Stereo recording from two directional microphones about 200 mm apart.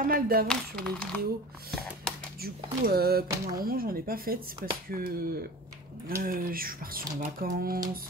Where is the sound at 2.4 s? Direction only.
50° right (ahead or behind).